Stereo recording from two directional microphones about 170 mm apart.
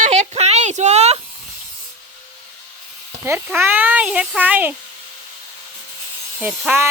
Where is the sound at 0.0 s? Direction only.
40° right (ahead or behind).